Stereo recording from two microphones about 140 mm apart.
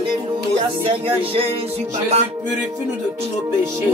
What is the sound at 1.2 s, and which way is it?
Music, 40° right (ahead or behind).